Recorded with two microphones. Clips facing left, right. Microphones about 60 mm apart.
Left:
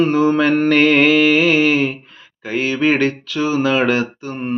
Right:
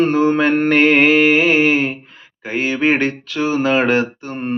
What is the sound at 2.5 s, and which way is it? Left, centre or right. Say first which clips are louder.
Speech: even; right.